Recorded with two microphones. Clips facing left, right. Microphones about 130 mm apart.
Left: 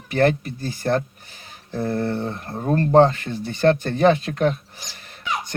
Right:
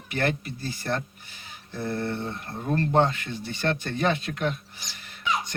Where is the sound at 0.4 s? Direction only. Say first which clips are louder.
Left 7 dB; 50° left (ahead or behind).